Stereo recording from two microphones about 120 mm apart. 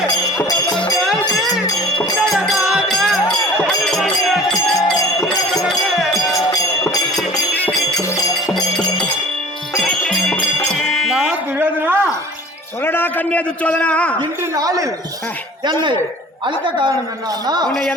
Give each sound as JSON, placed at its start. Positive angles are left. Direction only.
{"t": 0.3, "sound": "music", "side_deg": 30}
{"t": 0.9, "sound": "music", "side_deg": 0}
{"t": 2.2, "sound": "music", "side_deg": 0}
{"t": 6.3, "sound": "music", "side_deg": 30}
{"t": 8.5, "sound": "music", "side_deg": 5}
{"t": 11.5, "sound": "a sound", "side_deg": -15}
{"t": 12.8, "sound": "a man's voice", "side_deg": 15}
{"t": 14.2, "sound": "a woman's voice", "side_deg": -30}